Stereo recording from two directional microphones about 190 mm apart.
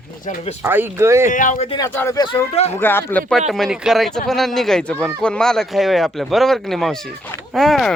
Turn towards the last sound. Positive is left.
turn(degrees=0)  # may be behind; listen again after turning